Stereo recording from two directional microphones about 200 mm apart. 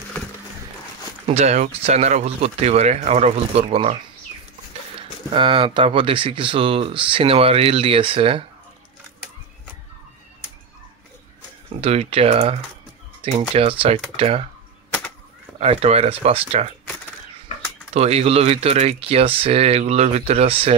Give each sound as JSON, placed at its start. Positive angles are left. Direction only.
{"t": 1.2, "sound": "speech", "side_deg": -35}
{"t": 5.3, "sound": "speech", "side_deg": -25}
{"t": 11.8, "sound": "speech", "side_deg": -30}
{"t": 15.6, "sound": "speech", "side_deg": -30}
{"t": 17.9, "sound": "speech", "side_deg": -30}